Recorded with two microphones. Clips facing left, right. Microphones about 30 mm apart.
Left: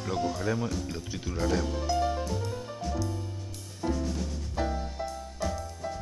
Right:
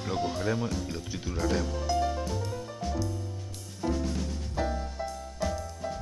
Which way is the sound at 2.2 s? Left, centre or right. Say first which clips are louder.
Even; centre.